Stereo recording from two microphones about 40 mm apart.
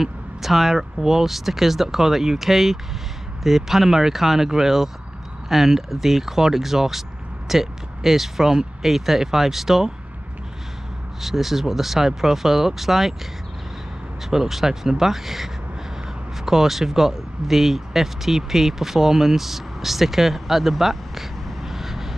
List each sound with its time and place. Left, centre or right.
0.0 s speech: centre
11.1 s speech: centre
14.3 s speech: centre